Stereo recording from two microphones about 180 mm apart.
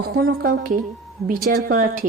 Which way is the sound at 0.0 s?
60° right (ahead or behind).